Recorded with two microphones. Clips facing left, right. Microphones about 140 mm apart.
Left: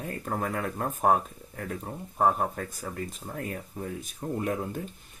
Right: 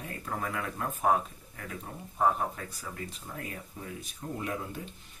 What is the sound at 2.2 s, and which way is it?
Speech, 45° left (ahead or behind).